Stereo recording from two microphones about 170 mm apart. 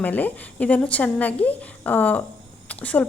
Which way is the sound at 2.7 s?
10° left (ahead or behind).